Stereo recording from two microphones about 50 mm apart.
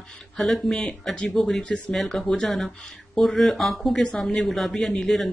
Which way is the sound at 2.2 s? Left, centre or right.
Centre.